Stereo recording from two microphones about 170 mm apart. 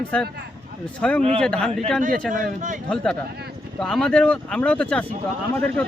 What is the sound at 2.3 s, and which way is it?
Speech, 50° right (ahead or behind).